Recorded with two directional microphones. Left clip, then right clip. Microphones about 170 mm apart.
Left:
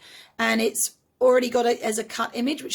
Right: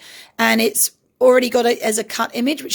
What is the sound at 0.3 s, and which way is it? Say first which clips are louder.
A woman's voice: right 6 dB; 50° right (ahead or behind).